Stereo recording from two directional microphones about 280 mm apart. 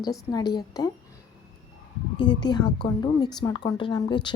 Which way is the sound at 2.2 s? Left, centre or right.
Centre.